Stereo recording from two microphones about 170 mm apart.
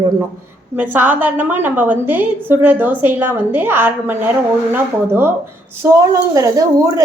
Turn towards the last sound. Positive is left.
turn(degrees=-20)  # may be behind; listen again after turning